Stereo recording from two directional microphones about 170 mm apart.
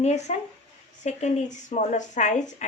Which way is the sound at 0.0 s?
40° left (ahead or behind).